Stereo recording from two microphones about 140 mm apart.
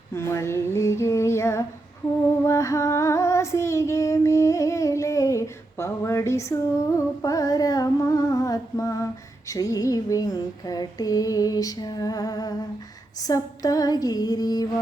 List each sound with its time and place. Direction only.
0.1 s female singing: 20° left (ahead or behind)
2.4 s child singing: 20° left (ahead or behind)
9.5 s female singing: 25° left (ahead or behind)